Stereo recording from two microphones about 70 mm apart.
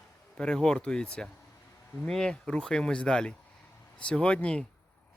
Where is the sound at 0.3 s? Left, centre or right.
Centre.